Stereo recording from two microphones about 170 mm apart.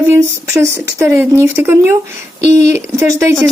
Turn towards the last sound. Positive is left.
turn(degrees=-15)  # may be behind; listen again after turning